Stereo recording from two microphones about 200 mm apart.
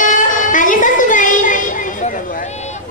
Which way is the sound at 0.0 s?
40° left (ahead or behind).